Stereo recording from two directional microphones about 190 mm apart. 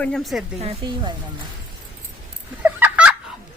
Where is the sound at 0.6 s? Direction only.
25° right (ahead or behind).